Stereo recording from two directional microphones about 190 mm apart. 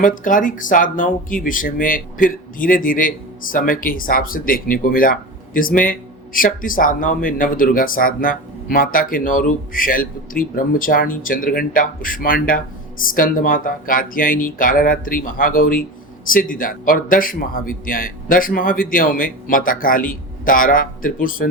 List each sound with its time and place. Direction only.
0.0 s speech: 45° left (ahead or behind)